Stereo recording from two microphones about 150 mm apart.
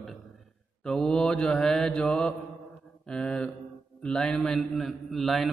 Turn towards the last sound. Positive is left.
turn(degrees=0)  # may be behind; listen again after turning